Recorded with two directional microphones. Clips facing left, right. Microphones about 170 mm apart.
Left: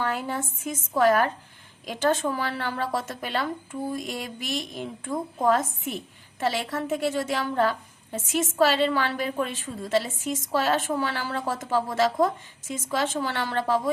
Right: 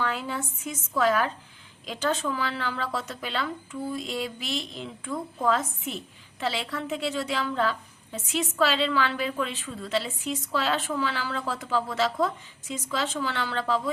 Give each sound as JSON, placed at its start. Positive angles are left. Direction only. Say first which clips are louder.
{"t": 0.0, "sound": "speech", "louder": "left 2 dB", "side_deg": 45}